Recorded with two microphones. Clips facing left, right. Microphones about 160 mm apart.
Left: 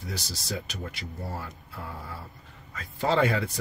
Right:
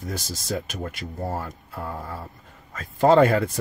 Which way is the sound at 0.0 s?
50° right (ahead or behind).